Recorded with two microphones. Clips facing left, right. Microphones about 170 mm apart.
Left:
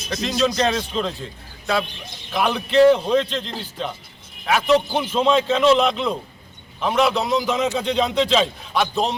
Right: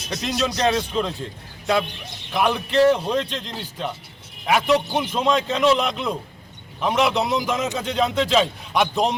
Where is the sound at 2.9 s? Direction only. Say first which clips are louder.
Left 4 dB; 10° right (ahead or behind).